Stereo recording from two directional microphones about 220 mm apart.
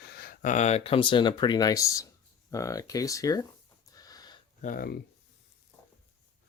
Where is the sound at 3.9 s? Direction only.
15° left (ahead or behind).